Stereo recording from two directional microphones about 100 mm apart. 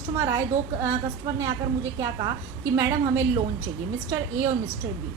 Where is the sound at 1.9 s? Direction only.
35° right (ahead or behind).